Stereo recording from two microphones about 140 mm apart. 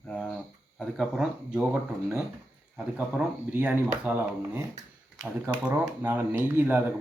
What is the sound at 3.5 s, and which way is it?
Speech, 10° right (ahead or behind).